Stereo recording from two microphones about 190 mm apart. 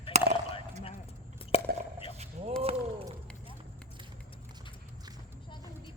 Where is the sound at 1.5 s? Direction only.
30° left (ahead or behind).